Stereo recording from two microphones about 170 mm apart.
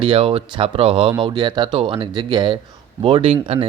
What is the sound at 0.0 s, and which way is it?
Speech, 30° right (ahead or behind).